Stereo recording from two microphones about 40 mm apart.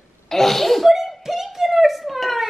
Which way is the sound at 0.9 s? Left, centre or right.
Centre.